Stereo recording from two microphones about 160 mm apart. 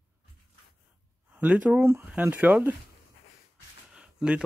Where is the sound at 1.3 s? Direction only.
10° right (ahead or behind).